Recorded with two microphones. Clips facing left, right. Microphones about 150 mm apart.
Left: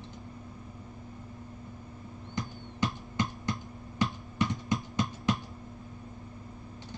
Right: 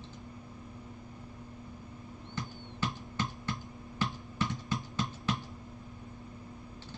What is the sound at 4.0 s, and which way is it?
Computer keyboard, 15° left (ahead or behind).